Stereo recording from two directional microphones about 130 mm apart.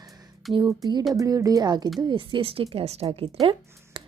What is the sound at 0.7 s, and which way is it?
Speech, 30° right (ahead or behind).